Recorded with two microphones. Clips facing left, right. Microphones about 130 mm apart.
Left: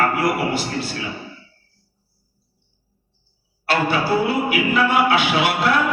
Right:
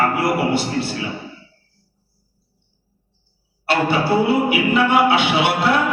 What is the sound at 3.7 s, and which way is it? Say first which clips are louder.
A man's voice: right 2 dB; 25° right (ahead or behind).